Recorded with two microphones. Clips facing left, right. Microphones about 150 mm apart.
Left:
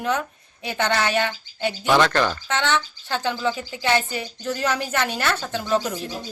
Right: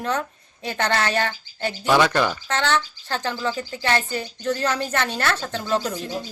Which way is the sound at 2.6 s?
Centre (ahead or behind).